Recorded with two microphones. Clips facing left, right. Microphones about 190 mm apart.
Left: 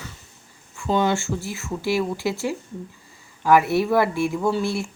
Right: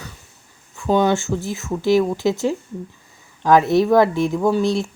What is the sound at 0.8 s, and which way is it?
Speech, 15° right (ahead or behind).